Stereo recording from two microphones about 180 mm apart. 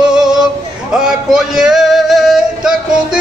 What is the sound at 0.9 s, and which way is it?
Music, 5° right (ahead or behind).